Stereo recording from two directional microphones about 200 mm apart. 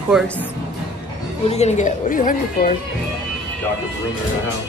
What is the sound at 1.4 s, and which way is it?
Speech, 35° left (ahead or behind).